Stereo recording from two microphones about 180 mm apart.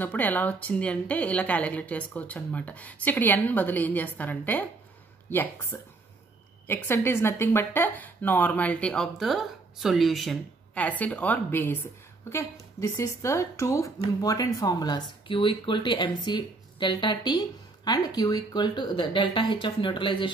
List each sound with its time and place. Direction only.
0.0 s speech: 10° left (ahead or behind); by 20.2 s 25° left (ahead or behind)